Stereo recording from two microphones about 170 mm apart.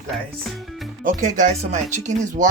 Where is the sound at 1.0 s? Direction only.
50° right (ahead or behind).